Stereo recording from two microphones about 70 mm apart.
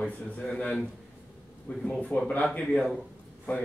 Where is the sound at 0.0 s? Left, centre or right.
Centre.